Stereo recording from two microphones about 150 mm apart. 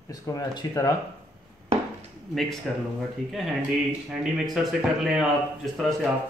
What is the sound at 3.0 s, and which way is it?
Speech, centre (ahead or behind).